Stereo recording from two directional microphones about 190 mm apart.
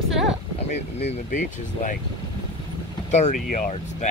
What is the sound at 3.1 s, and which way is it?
Speech, 40° left (ahead or behind).